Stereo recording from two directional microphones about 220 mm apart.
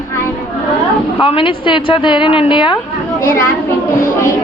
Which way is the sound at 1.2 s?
25° left (ahead or behind).